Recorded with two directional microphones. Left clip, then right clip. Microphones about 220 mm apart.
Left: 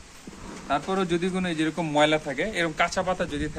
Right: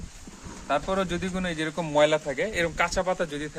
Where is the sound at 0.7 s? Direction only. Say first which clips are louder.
Left 1 dB; 45° right (ahead or behind).